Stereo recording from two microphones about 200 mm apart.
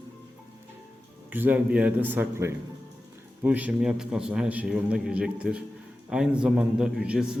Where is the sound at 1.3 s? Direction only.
10° right (ahead or behind).